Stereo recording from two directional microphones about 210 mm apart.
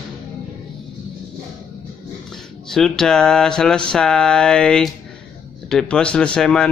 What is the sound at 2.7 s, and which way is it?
Speech, centre (ahead or behind).